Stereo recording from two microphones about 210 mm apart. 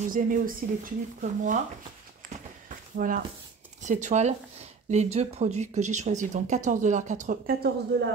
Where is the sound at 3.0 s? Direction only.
40° right (ahead or behind).